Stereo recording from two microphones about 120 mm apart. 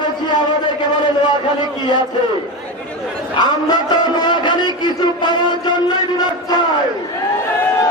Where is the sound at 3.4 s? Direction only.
35° left (ahead or behind).